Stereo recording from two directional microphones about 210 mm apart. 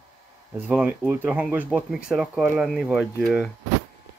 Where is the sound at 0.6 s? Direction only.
10° right (ahead or behind).